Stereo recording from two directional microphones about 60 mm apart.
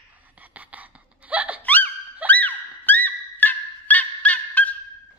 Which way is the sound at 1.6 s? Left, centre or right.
Left.